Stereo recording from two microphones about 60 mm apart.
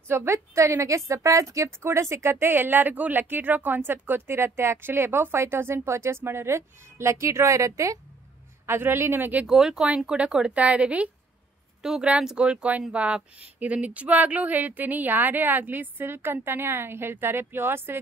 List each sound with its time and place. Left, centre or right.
0.1 s a woman's voice: right
1.9 s speech: right
8.6 s speech: right
9.5 s speech: centre
9.8 s a woman's voice: right